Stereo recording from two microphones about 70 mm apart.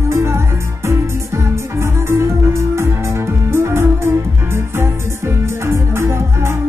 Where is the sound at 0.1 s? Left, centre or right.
Right.